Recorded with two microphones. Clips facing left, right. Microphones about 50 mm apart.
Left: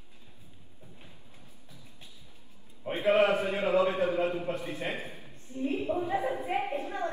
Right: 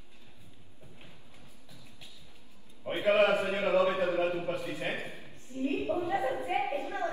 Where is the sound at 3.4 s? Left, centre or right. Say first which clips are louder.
Left 1 dB; right.